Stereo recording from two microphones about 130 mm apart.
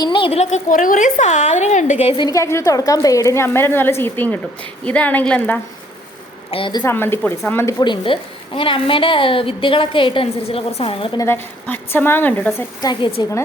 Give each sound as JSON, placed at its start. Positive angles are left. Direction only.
{"t": 0.0, "sound": "speech", "side_deg": 40}
{"t": 0.7, "sound": "a woman's voice", "side_deg": 90}
{"t": 2.1, "sound": "a woman's voice", "side_deg": 30}
{"t": 6.5, "sound": "a woman's voice", "side_deg": 40}
{"t": 6.8, "sound": "speech", "side_deg": 15}
{"t": 7.8, "sound": "a woman's voice", "side_deg": 40}
{"t": 11.6, "sound": "speech", "side_deg": 15}
{"t": 12.8, "sound": "a woman's voice", "side_deg": 30}